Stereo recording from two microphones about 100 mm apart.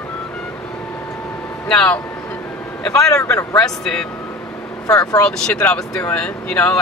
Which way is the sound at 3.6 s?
5° left (ahead or behind).